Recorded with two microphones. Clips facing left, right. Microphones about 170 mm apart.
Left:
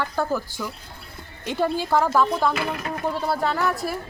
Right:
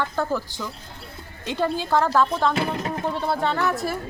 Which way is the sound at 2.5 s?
30° right (ahead or behind).